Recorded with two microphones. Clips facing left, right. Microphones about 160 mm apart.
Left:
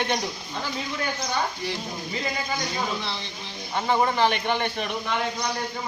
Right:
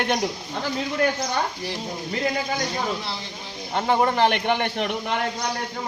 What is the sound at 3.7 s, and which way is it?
A woman's voice, 50° right (ahead or behind).